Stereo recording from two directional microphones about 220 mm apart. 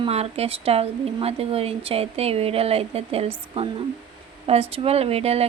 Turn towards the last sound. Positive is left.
turn(degrees=-30)  # may be behind; listen again after turning